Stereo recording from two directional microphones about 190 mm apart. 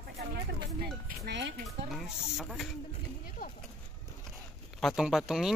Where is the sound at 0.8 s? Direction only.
60° right (ahead or behind).